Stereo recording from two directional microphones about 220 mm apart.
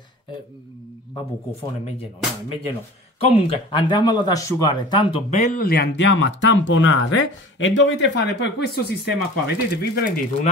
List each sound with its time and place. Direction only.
3.2 s speech: 25° left (ahead or behind); by 10.1 s 45° left (ahead or behind)